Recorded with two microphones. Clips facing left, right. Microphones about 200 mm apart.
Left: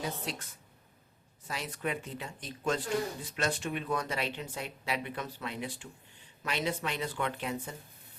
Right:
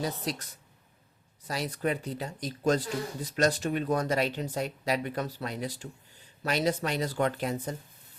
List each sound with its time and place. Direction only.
0.0 s speech: 40° right (ahead or behind)